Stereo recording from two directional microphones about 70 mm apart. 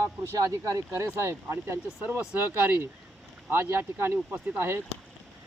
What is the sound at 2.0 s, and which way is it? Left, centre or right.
Speech, right.